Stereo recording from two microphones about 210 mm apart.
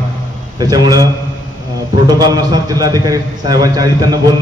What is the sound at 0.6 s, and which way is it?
Speech, 15° right (ahead or behind).